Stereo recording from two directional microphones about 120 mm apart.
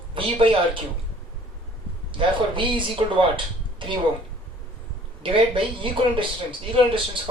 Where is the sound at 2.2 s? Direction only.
45° right (ahead or behind).